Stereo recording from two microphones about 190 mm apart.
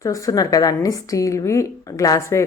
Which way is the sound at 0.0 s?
20° left (ahead or behind).